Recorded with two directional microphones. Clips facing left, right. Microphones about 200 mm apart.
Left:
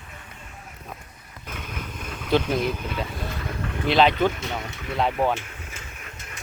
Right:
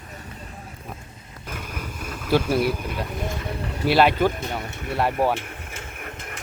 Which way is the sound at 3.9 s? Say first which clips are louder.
Right 1 dB; 5° right (ahead or behind).